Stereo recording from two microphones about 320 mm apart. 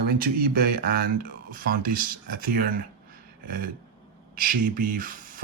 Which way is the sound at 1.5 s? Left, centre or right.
Right.